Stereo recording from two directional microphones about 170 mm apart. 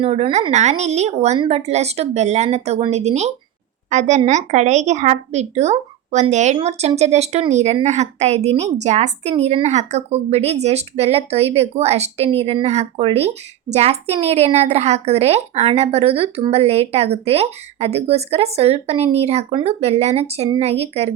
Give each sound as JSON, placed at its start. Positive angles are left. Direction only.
{"t": 0.0, "sound": "a woman's voice", "side_deg": -35}